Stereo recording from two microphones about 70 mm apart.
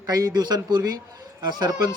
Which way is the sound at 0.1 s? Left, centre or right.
Right.